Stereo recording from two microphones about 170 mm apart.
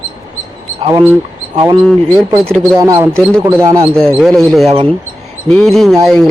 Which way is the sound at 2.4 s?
5° left (ahead or behind).